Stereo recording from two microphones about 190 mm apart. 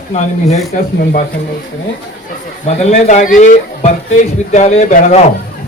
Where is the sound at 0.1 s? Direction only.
35° left (ahead or behind).